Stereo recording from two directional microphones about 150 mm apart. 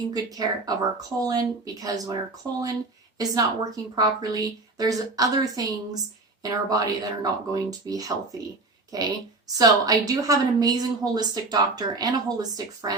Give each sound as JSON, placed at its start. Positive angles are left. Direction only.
{"t": 0.1, "sound": "a woman's voice", "side_deg": -25}